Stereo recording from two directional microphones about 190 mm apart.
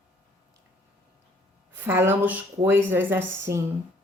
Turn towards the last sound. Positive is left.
turn(degrees=-15)  # may be behind; listen again after turning